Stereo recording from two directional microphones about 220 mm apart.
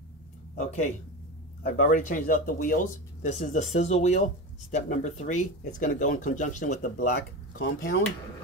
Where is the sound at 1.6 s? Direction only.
35° left (ahead or behind).